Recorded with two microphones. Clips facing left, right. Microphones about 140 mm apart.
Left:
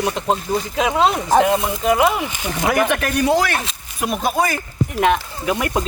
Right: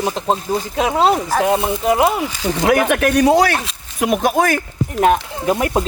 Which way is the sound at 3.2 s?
75° right (ahead or behind).